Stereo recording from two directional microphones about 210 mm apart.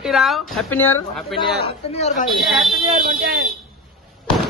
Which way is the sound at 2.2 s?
Centre (ahead or behind).